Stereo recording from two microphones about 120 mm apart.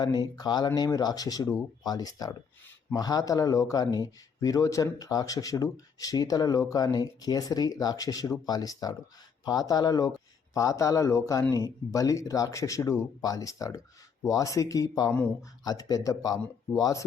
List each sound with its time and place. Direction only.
0.0 s speech: 35° left (ahead or behind)